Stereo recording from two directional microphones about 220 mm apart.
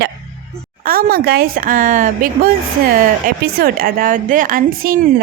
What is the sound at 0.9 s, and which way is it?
A woman's voice, 45° right (ahead or behind).